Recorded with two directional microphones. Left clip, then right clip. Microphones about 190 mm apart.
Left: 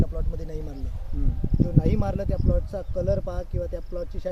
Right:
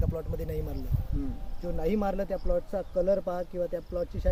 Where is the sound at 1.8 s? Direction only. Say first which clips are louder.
Right 4 dB; 40° right (ahead or behind).